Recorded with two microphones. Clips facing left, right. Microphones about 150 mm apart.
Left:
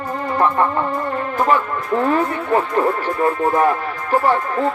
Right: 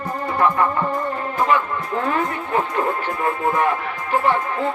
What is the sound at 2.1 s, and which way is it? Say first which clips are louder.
Speech: left 4 dB; 35° left (ahead or behind).